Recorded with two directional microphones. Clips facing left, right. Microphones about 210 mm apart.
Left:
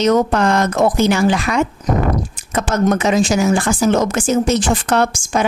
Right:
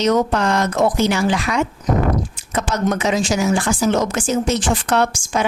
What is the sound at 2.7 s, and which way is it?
A woman's voice, 50° left (ahead or behind).